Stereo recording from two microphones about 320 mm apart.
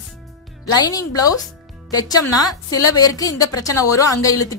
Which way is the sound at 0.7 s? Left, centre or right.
Centre.